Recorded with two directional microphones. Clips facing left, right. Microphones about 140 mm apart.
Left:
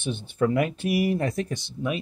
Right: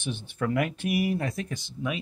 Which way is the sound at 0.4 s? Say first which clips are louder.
Left 4 dB; 25° left (ahead or behind).